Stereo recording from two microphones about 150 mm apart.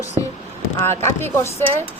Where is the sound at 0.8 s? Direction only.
15° left (ahead or behind).